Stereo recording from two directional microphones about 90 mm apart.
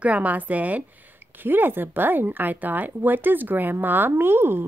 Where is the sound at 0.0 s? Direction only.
15° right (ahead or behind).